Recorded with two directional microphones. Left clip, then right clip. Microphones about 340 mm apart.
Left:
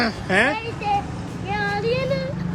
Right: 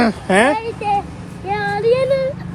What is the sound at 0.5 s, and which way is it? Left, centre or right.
Speech, centre.